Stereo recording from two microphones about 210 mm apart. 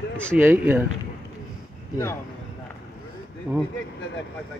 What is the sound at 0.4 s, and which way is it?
Speech, 10° right (ahead or behind).